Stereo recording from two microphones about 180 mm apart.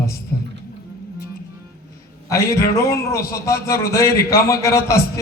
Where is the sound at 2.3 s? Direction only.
15° left (ahead or behind).